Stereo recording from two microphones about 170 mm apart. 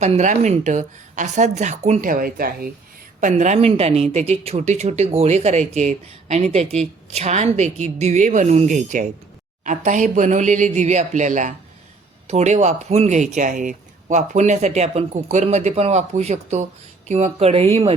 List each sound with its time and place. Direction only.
0.0 s speech: 45° right (ahead or behind); by 2.7 s 60° right (ahead or behind)
3.2 s speech: 45° right (ahead or behind)